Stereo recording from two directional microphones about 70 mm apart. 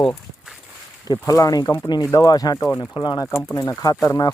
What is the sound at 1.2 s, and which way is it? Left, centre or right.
Speech, left.